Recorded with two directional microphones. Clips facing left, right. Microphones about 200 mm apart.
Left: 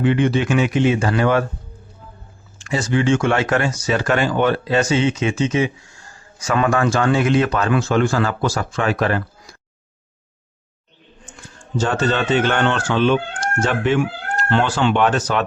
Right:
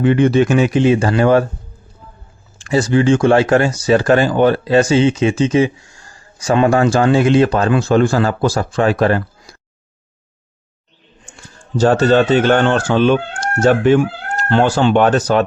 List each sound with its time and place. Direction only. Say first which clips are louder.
0.0 s speech: right 5 dB; 45° right (ahead or behind)
2.6 s speech: right 6 dB; 35° right (ahead or behind)
11.8 s speech: right 8 dB; 35° right (ahead or behind)